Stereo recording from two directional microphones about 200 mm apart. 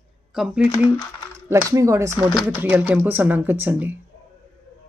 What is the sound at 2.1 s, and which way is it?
Speech, centre (ahead or behind).